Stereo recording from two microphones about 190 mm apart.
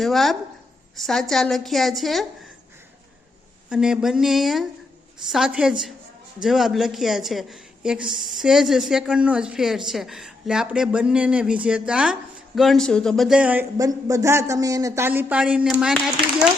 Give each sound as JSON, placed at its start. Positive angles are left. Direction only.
{"t": 0.0, "sound": "speech", "side_deg": 0}
{"t": 3.7, "sound": "speech", "side_deg": -5}